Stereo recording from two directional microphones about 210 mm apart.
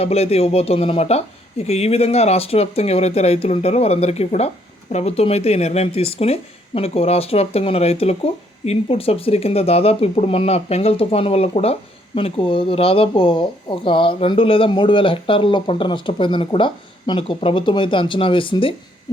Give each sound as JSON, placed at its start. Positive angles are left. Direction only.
{"t": 0.0, "sound": "speech", "side_deg": 30}